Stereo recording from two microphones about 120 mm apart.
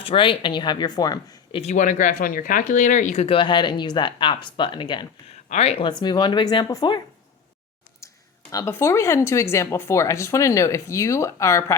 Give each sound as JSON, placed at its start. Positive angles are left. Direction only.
{"t": 0.0, "sound": "speech", "side_deg": 45}
{"t": 1.5, "sound": "speech", "side_deg": 80}
{"t": 3.2, "sound": "speech", "side_deg": 45}
{"t": 5.5, "sound": "speech", "side_deg": 65}
{"t": 5.8, "sound": "speech", "side_deg": 35}
{"t": 8.0, "sound": "speech", "side_deg": 25}